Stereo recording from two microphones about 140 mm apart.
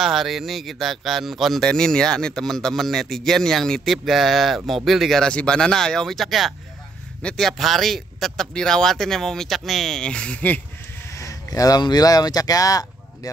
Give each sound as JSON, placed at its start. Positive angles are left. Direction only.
{"t": 0.0, "sound": "speech", "side_deg": 0}
{"t": 11.1, "sound": "speech", "side_deg": 20}